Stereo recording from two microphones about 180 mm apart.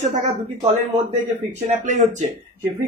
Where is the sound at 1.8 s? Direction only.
40° right (ahead or behind).